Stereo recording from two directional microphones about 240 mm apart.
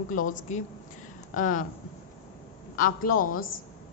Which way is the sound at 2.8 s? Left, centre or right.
Left.